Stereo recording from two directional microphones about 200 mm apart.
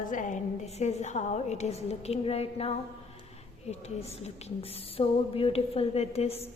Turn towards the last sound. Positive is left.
turn(degrees=30)  # may be behind; listen again after turning